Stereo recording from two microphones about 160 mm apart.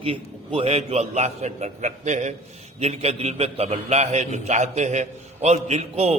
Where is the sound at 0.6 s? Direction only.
40° right (ahead or behind).